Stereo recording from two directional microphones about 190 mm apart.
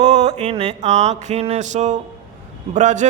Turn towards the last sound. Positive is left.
turn(degrees=-40)  # may be behind; listen again after turning